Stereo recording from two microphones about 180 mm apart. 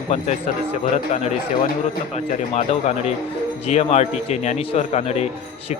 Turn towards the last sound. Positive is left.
turn(degrees=35)  # may be behind; listen again after turning